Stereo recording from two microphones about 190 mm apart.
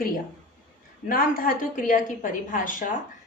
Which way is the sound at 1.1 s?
50° left (ahead or behind).